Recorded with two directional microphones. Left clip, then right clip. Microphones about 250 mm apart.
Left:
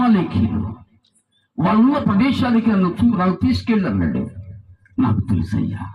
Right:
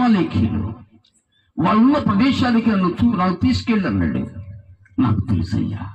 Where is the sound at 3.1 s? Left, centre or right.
Left.